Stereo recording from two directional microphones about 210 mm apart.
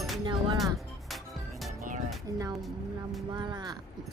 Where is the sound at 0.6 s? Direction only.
Centre (ahead or behind).